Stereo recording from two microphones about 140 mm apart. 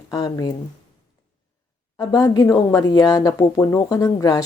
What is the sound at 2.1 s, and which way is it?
Speech, 25° left (ahead or behind).